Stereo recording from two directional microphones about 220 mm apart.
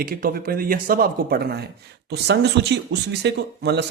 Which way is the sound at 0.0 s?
40° right (ahead or behind).